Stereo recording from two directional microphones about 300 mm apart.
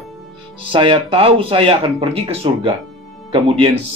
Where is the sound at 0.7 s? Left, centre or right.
Centre.